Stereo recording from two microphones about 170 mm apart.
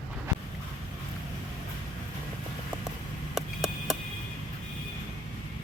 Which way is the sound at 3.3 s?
Centre (ahead or behind).